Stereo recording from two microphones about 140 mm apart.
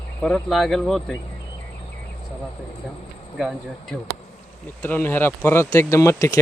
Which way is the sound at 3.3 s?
5° right (ahead or behind).